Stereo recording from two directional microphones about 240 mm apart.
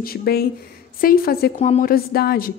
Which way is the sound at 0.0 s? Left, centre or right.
Left.